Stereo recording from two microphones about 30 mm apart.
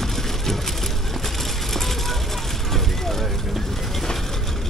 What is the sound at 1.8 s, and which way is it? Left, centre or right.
Vehicle, centre.